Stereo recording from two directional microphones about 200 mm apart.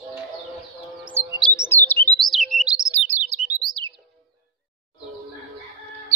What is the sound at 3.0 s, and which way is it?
Chirp, 35° right (ahead or behind).